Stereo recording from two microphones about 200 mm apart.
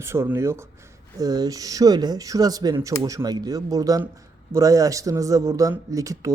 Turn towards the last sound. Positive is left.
turn(degrees=-15)  # may be behind; listen again after turning